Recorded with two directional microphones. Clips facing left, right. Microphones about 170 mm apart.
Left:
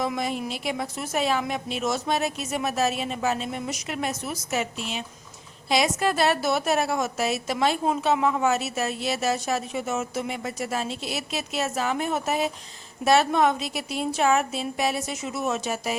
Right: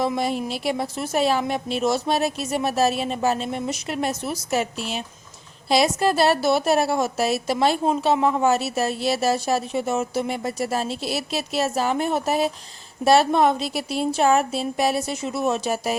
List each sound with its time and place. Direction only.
0.0 s a woman's voice: 30° right (ahead or behind)